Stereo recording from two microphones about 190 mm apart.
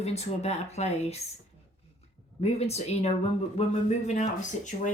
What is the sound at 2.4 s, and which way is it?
Speech, 35° left (ahead or behind).